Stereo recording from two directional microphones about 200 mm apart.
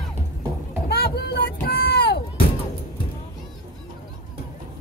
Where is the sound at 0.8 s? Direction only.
55° left (ahead or behind).